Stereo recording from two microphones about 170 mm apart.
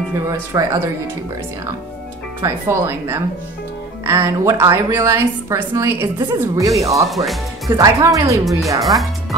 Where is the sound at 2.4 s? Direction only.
15° right (ahead or behind).